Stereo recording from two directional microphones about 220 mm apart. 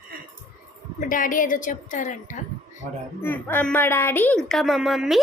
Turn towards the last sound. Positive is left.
turn(degrees=0)  # may be behind; listen again after turning